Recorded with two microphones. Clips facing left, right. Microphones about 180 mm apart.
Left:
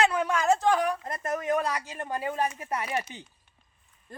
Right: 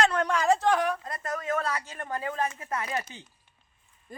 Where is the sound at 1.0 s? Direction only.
20° left (ahead or behind).